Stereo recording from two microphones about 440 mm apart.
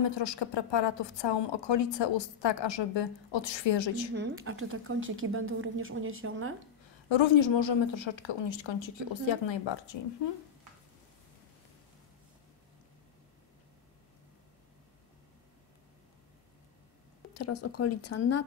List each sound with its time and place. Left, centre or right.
0.0 s a woman's voice: left
4.1 s a woman's voice: right
7.1 s a woman's voice: left
17.3 s speech: left